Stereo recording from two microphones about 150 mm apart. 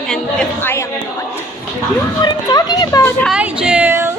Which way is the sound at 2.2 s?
25° left (ahead or behind).